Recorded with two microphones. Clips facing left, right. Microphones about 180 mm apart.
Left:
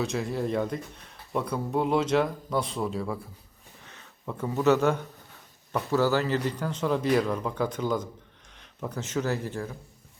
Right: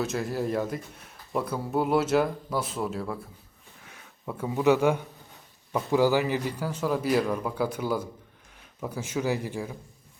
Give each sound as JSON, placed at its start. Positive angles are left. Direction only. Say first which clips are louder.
{"t": 0.0, "sound": "a man's voice", "louder": "even", "side_deg": 0}